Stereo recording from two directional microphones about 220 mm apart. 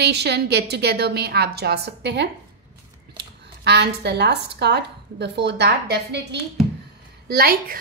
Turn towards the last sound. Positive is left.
turn(degrees=-45)  # may be behind; listen again after turning